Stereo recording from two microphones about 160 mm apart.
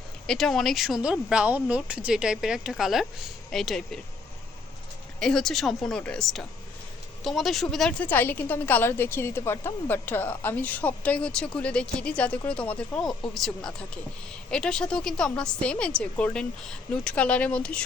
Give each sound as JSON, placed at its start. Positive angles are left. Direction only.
{"t": 0.3, "sound": "speech", "side_deg": 5}
{"t": 5.2, "sound": "speech", "side_deg": 0}